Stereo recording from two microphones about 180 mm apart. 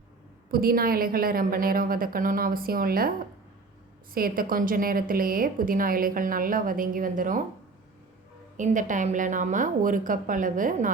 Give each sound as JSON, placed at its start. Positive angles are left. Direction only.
{"t": 0.5, "sound": "a woman's voice", "side_deg": -55}
{"t": 4.1, "sound": "a woman's voice", "side_deg": -55}
{"t": 8.5, "sound": "a woman's voice", "side_deg": -45}